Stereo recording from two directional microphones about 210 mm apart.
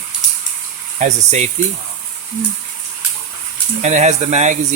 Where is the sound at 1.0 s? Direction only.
35° right (ahead or behind).